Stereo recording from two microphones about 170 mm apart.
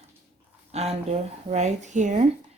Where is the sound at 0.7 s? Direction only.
40° right (ahead or behind).